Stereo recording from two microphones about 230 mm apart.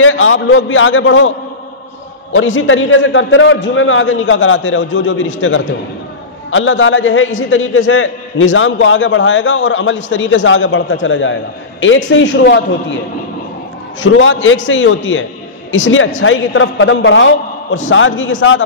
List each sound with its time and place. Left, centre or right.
0.0 s a man's voice: left
2.3 s a man's voice: left
14.0 s a man's voice: left